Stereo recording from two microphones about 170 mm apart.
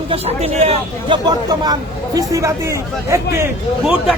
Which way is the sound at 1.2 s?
25° right (ahead or behind).